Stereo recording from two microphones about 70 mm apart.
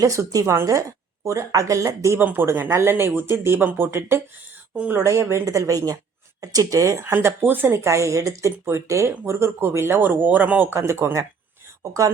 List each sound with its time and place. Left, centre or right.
0.0 s speech: right
2.1 s speech: right
2.6 s speech: right
2.9 s speech: right
3.6 s speech: right
5.0 s speech: right
7.0 s speech: right
7.7 s speech: right
10.7 s speech: right